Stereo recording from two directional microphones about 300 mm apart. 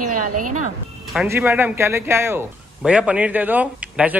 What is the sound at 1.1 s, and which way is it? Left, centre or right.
A woman's voice, centre.